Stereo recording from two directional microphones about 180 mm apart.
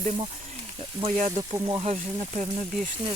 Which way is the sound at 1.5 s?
25° right (ahead or behind).